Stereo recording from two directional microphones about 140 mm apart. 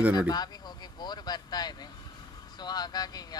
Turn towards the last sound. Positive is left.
turn(degrees=30)  # may be behind; listen again after turning